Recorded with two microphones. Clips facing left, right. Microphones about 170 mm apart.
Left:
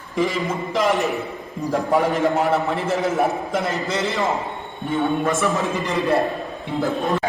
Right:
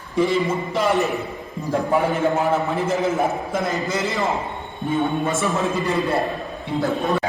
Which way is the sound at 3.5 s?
70° left (ahead or behind).